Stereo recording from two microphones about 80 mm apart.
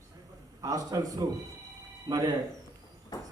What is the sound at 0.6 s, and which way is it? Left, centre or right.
A man's voice, right.